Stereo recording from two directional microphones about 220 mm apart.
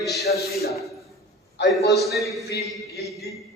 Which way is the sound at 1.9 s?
Centre (ahead or behind).